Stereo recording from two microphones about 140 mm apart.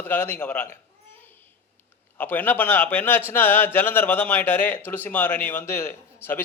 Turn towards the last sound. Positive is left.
turn(degrees=15)  # may be behind; listen again after turning